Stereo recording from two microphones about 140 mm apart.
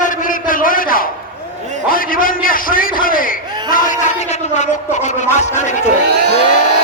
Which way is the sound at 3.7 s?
75° left (ahead or behind).